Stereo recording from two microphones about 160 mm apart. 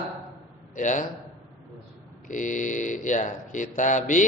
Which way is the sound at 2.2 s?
55° left (ahead or behind).